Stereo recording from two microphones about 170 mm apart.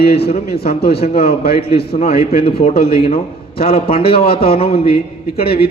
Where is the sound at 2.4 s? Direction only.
35° left (ahead or behind).